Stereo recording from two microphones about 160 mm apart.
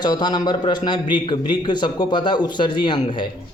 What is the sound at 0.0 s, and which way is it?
A man's voice, 25° left (ahead or behind).